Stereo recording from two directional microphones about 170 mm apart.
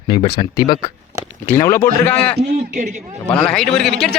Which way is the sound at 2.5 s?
65° right (ahead or behind).